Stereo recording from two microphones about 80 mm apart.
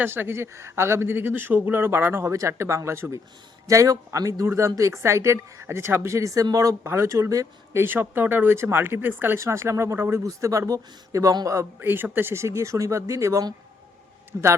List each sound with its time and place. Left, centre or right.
0.0 s speech: right
7.8 s speech: right
11.8 s speech: right